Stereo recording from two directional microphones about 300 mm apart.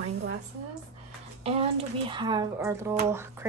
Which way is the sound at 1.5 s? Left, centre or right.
Centre.